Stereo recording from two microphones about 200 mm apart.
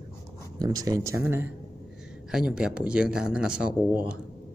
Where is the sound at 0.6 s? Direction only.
20° right (ahead or behind).